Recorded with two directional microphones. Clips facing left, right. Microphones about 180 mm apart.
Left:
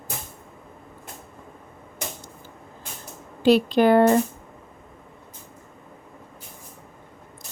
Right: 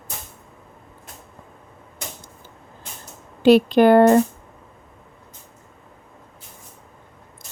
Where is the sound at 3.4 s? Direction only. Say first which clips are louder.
Right 4 dB; 60° right (ahead or behind).